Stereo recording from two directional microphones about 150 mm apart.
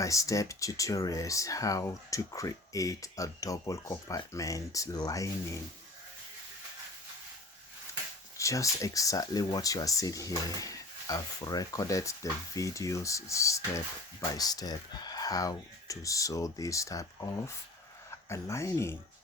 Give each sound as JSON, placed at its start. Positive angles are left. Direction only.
{"t": 0.0, "sound": "speech", "side_deg": 20}
{"t": 8.4, "sound": "speech", "side_deg": 20}